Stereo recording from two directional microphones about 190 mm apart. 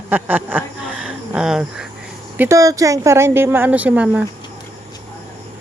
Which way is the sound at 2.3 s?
15° right (ahead or behind).